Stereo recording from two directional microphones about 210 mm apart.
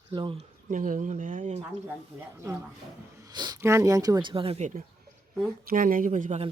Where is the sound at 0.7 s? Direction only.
35° right (ahead or behind).